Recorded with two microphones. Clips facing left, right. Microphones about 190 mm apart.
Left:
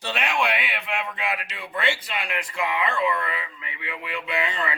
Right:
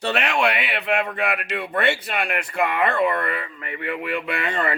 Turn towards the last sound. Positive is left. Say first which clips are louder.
# right 3 dB
turn(degrees=-55)  # may be behind; listen again after turning